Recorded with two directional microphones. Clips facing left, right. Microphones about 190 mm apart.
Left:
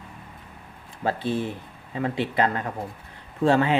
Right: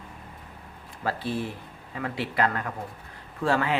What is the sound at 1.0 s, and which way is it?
Speech, 20° left (ahead or behind).